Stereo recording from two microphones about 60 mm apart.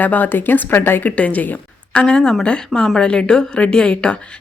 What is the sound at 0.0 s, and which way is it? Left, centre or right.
A woman's voice, left.